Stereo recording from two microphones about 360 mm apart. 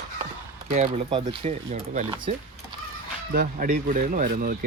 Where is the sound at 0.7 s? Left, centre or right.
Centre.